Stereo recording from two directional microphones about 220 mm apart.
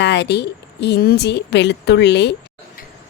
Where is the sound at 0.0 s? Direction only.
50° left (ahead or behind).